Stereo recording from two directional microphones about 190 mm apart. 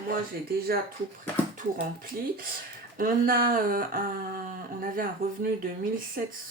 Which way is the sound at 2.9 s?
50° right (ahead or behind).